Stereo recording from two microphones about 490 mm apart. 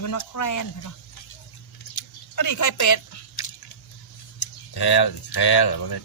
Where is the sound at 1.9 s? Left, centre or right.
Left.